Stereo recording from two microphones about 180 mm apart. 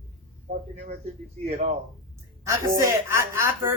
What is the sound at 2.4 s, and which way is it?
Speech, 15° right (ahead or behind).